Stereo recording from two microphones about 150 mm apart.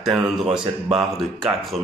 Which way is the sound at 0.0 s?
Centre (ahead or behind).